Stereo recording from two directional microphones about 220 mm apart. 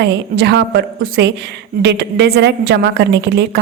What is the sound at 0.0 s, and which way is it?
A woman's voice, 50° right (ahead or behind).